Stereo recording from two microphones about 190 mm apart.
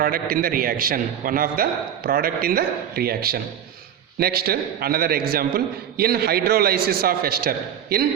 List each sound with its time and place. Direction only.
0.0 s a man's voice: 50° right (ahead or behind)